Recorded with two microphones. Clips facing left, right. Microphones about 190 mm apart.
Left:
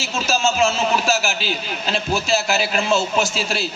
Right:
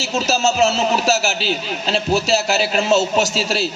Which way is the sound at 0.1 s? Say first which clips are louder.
Right 2 dB; 40° right (ahead or behind).